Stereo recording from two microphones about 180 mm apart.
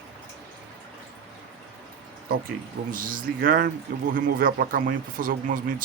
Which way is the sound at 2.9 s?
50° right (ahead or behind).